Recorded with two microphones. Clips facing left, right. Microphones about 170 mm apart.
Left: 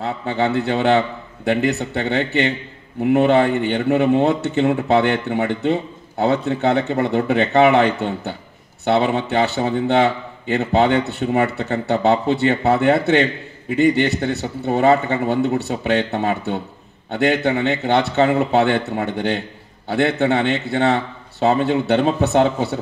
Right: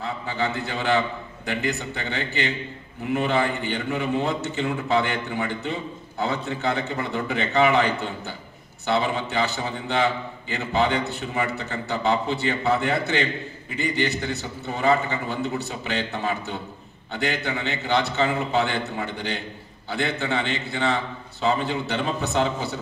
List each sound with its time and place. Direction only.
0.0 s a man's voice: 65° left (ahead or behind)